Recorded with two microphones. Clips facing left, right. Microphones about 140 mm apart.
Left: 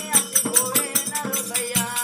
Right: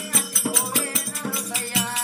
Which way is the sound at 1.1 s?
60° left (ahead or behind).